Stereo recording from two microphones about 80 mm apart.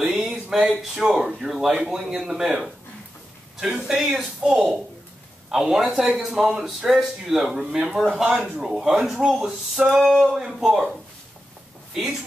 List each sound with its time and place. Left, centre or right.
0.2 s a man's voice: centre
11.9 s speech: centre